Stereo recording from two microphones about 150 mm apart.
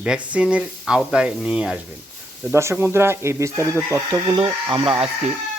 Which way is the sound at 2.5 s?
20° right (ahead or behind).